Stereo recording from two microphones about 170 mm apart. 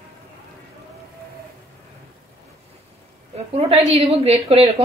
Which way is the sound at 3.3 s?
35° right (ahead or behind).